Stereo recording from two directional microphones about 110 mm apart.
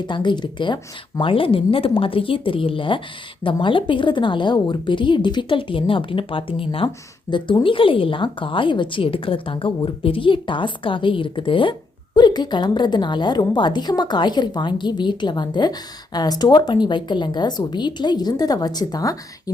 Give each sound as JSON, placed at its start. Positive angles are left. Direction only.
{"t": 0.1, "sound": "a woman's voice", "side_deg": 45}